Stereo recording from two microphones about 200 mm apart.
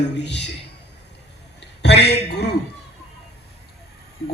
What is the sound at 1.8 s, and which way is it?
Speech, 55° left (ahead or behind).